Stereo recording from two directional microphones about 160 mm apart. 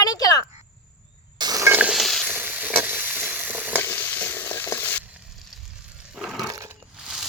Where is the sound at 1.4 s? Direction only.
20° right (ahead or behind); by 2.2 s centre (ahead or behind).